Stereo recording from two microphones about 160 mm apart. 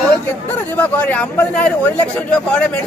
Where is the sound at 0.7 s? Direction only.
10° left (ahead or behind).